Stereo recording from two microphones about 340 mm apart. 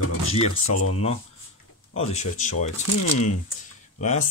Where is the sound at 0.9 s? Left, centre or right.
Centre.